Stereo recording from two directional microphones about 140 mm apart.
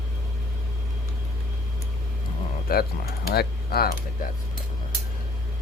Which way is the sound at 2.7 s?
90° left.